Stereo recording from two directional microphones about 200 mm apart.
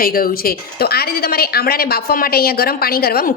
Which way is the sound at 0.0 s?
45° left (ahead or behind).